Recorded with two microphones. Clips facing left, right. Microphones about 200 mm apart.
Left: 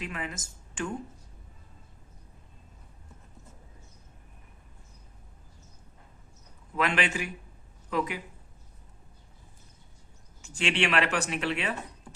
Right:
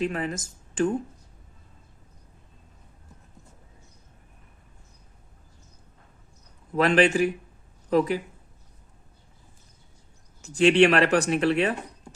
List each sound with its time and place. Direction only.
0.0 s speech: 40° right (ahead or behind)
6.7 s speech: 35° right (ahead or behind)
10.4 s speech: 40° right (ahead or behind)